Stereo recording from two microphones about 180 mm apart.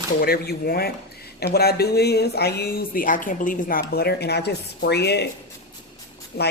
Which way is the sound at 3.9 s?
60° left (ahead or behind).